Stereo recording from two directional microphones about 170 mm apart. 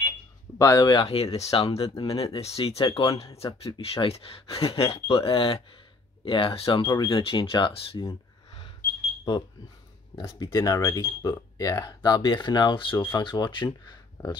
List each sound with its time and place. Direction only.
0.6 s speech: 20° left (ahead or behind)
1.0 s speech: 35° left (ahead or behind)
8.1 s a sound: 25° left (ahead or behind)
10.1 s speech: 20° left (ahead or behind)